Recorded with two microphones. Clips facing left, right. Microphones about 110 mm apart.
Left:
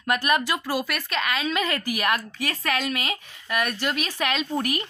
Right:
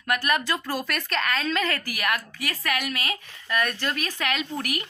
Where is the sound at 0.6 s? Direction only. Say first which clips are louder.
Left 2 dB; 5° left (ahead or behind); by 4.8 s 25° left (ahead or behind).